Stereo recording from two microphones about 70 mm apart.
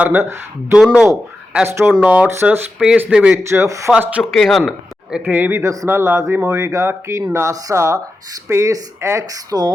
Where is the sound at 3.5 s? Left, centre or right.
Right.